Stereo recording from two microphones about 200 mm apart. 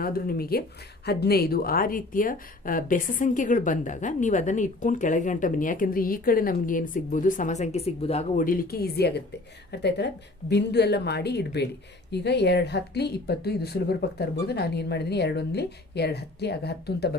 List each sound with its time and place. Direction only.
0.0 s a woman's voice: 50° left (ahead or behind)